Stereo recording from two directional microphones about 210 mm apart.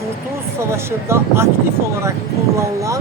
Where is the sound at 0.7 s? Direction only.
10° right (ahead or behind).